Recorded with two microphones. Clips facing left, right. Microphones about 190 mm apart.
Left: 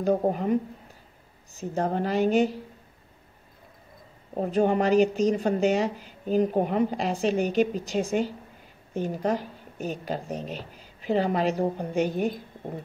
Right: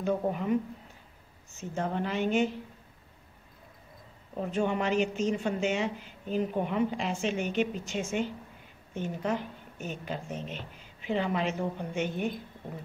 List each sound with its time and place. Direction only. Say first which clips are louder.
0.0 s speech: left 5 dB; 40° left (ahead or behind)
1.6 s speech: left 5 dB; 35° left (ahead or behind)
4.3 s speech: left 6 dB; 40° left (ahead or behind)